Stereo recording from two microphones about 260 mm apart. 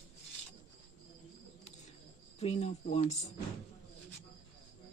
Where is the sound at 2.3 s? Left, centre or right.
Left.